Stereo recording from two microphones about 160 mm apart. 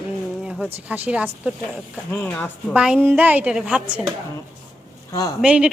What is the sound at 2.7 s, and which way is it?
Speech, 5° right (ahead or behind).